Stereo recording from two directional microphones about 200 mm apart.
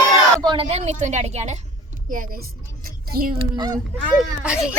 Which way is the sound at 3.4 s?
20° right (ahead or behind).